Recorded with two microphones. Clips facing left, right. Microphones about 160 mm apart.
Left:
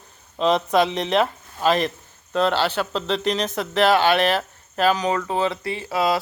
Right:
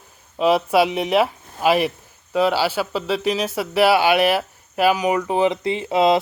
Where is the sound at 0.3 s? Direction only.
10° right (ahead or behind).